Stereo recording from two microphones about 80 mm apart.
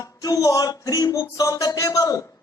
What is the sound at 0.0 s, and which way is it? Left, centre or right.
Speech, left.